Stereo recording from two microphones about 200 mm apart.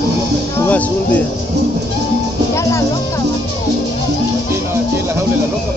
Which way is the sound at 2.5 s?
15° left (ahead or behind).